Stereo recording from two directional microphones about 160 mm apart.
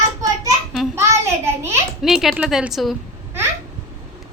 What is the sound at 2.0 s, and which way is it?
Speech, centre (ahead or behind).